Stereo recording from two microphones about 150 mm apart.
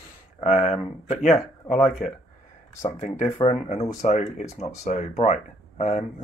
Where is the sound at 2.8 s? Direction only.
50° left (ahead or behind).